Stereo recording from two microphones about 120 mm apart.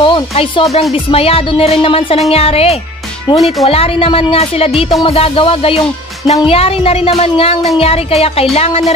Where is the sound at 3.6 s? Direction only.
55° left (ahead or behind).